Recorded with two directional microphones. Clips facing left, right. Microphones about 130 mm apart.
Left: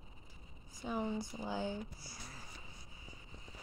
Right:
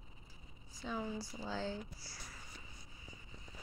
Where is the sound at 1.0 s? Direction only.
20° left (ahead or behind).